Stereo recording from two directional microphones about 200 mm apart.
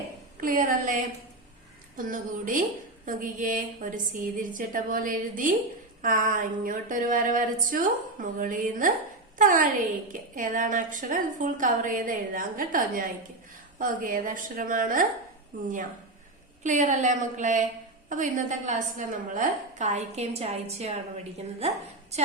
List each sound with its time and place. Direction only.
0.4 s speech: 40° right (ahead or behind)
2.0 s a woman's voice: 40° right (ahead or behind)
22.1 s speech: 35° right (ahead or behind)